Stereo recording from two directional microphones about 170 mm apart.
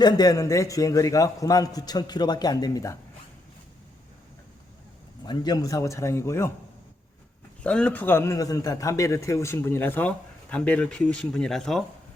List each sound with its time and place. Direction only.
0.0 s a man's voice: 25° left (ahead or behind)
5.2 s a man's voice: 25° left (ahead or behind)
7.6 s a man's voice: 5° left (ahead or behind)